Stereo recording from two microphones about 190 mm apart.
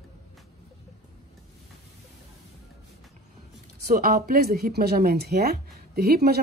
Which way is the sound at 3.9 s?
50° right (ahead or behind).